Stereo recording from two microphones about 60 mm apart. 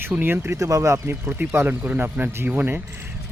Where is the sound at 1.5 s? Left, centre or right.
Right.